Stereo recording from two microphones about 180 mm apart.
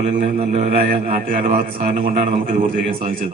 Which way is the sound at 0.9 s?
50° right (ahead or behind).